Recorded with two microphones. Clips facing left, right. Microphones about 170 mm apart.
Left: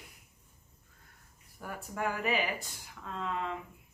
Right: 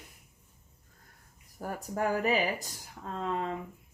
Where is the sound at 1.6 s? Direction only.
40° right (ahead or behind).